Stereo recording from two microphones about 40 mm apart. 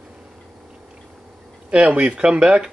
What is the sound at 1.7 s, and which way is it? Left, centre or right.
Speech, right.